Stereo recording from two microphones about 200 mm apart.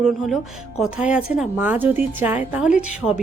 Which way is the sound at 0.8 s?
5° right (ahead or behind).